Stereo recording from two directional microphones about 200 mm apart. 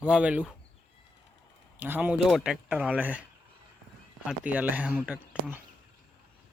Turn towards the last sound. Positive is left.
turn(degrees=-5)  # may be behind; listen again after turning